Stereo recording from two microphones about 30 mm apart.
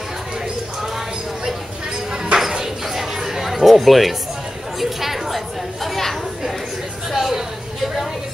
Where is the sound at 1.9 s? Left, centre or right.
Right.